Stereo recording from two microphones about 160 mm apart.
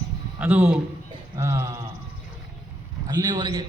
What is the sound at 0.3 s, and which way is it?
A man's voice, 10° right (ahead or behind).